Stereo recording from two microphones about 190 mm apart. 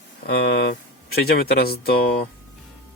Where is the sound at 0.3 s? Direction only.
55° left (ahead or behind).